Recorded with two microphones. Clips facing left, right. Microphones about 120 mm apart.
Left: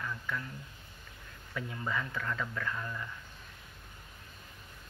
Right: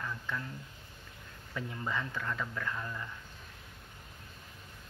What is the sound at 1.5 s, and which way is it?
Speech, 20° right (ahead or behind).